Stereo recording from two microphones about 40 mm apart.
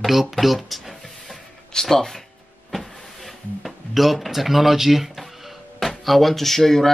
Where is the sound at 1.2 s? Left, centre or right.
Centre.